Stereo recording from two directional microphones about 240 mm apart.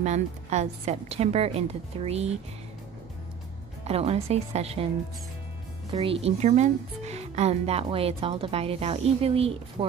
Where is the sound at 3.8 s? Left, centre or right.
Right.